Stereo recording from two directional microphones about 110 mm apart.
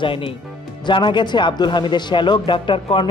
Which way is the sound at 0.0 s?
50° left (ahead or behind).